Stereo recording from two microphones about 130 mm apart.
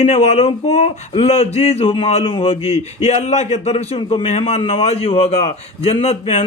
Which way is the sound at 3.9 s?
45° left (ahead or behind).